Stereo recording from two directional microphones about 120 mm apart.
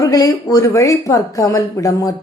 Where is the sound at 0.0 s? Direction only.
30° left (ahead or behind).